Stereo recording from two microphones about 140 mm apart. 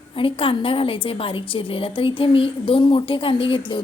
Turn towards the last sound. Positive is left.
turn(degrees=35)  # may be behind; listen again after turning